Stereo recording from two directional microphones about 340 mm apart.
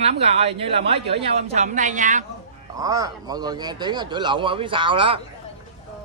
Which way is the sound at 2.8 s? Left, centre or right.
Centre.